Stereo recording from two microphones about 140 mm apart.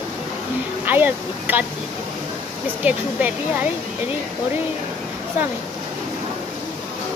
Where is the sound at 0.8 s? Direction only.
15° right (ahead or behind).